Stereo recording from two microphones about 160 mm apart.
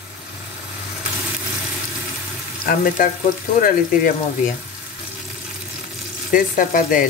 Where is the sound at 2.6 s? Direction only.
60° left (ahead or behind).